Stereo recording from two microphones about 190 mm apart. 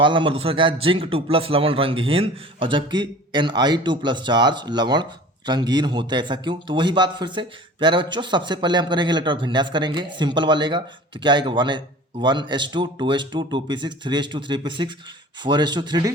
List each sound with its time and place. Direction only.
0.0 s a man's voice: 25° right (ahead or behind)